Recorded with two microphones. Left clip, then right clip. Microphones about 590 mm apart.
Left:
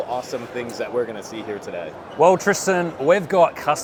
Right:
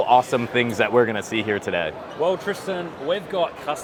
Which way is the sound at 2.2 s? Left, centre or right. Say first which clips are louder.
Left 8 dB; left.